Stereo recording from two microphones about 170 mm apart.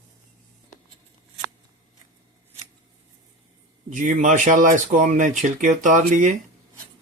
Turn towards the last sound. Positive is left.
turn(degrees=-50)  # may be behind; listen again after turning